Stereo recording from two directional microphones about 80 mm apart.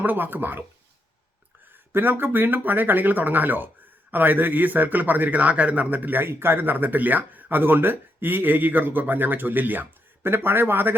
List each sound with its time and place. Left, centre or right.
0.0 s a man's voice: right
1.9 s a man's voice: right